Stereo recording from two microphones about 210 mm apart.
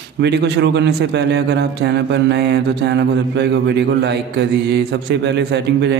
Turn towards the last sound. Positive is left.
turn(degrees=-55)  # may be behind; listen again after turning